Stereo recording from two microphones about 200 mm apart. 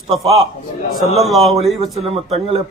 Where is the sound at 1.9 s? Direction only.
30° right (ahead or behind).